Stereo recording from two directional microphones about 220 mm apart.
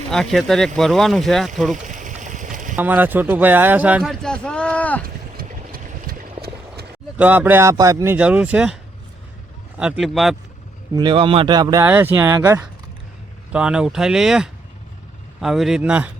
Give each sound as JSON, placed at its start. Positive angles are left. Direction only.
{"t": 0.1, "sound": "speech", "side_deg": 0}
{"t": 1.7, "sound": "a sound", "side_deg": -35}
{"t": 2.7, "sound": "speech", "side_deg": -5}
{"t": 5.0, "sound": "a sound", "side_deg": -40}
{"t": 7.2, "sound": "speech", "side_deg": -5}
{"t": 10.9, "sound": "speech", "side_deg": -20}